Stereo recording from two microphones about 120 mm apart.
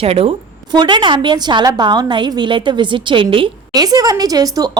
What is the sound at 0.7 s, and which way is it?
A woman's voice, 35° right (ahead or behind).